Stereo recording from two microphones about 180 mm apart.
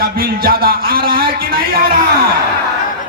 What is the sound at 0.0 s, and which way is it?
A man's voice, 55° right (ahead or behind).